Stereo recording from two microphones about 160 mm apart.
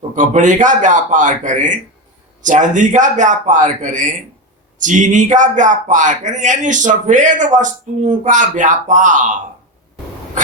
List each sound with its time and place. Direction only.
0.2 s speech: 50° right (ahead or behind)